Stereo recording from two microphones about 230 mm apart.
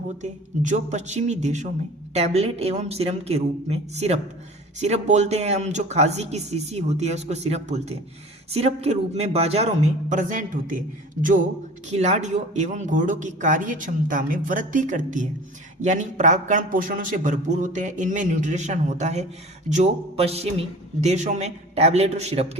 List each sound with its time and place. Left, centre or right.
0.1 s speech: right